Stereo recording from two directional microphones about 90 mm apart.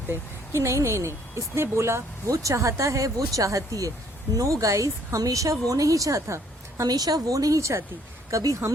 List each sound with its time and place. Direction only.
0.1 s a woman's voice: 30° right (ahead or behind)